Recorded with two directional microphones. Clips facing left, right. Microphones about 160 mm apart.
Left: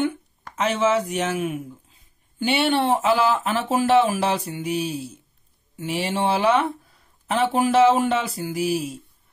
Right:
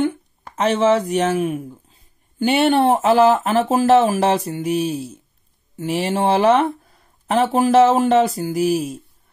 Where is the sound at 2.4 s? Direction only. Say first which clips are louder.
Right 5 dB; 45° right (ahead or behind).